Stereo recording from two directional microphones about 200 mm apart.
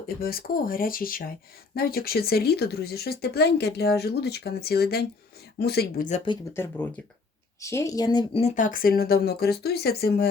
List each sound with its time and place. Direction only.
0.2 s speech: 50° left (ahead or behind)
6.1 s speech: 35° left (ahead or behind)
6.3 s speech: 10° left (ahead or behind); by 10.2 s 50° left (ahead or behind)